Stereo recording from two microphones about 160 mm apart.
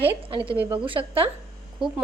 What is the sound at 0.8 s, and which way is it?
Speech, 35° right (ahead or behind).